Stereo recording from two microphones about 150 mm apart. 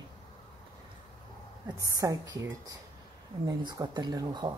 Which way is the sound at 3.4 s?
30° right (ahead or behind).